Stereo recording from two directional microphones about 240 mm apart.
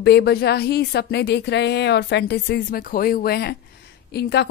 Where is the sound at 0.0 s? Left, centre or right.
Left.